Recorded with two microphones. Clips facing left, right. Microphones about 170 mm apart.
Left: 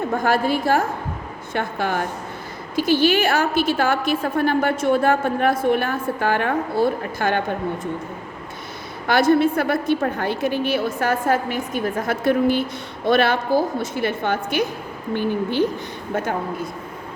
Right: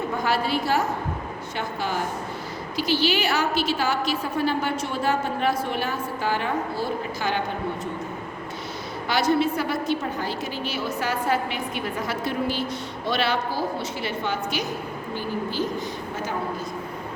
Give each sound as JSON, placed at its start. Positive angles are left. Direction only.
{"t": 0.1, "sound": "a woman's voice", "side_deg": 50}
{"t": 9.0, "sound": "a woman's voice", "side_deg": 55}